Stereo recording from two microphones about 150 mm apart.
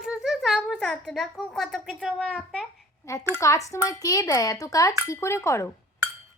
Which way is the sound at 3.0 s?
20° left (ahead or behind).